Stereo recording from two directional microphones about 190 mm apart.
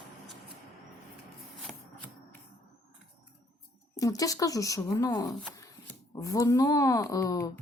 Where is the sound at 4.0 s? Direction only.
20° left (ahead or behind).